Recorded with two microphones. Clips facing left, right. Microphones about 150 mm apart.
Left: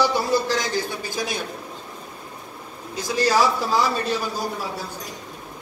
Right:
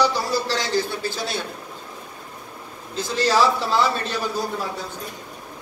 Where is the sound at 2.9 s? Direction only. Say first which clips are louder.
Even; 10° left (ahead or behind).